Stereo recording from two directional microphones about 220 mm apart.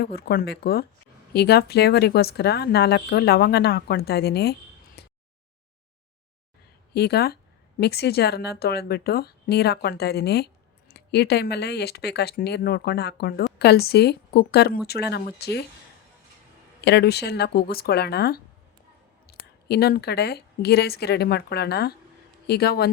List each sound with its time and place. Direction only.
0.0 s a woman's voice: 45° left (ahead or behind)
5.0 s a sound: 45° left (ahead or behind)
6.9 s a woman's voice: 45° left (ahead or behind)
16.8 s a woman's voice: 50° left (ahead or behind)